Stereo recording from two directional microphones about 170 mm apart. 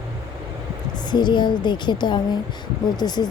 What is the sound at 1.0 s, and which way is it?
A woman's voice, 25° left (ahead or behind).